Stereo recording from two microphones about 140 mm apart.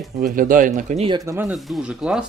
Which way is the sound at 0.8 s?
60° right (ahead or behind).